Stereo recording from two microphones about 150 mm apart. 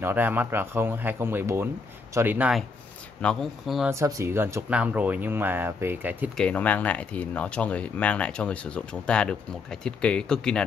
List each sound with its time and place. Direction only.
0.0 s speech: 15° right (ahead or behind)
3.2 s speech: 5° left (ahead or behind)
3.9 s speech: 20° right (ahead or behind)
6.3 s speech: 10° left (ahead or behind)